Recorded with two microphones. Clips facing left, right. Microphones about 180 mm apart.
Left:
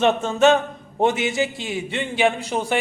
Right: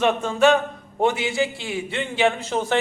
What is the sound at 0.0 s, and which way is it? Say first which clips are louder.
A man's voice: left 1 dB; 25° left (ahead or behind).